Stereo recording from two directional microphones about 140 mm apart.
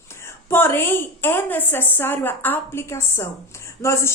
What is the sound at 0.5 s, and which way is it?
A woman's voice, 15° left (ahead or behind).